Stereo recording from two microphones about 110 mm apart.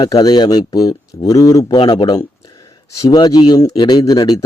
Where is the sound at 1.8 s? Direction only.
50° left (ahead or behind).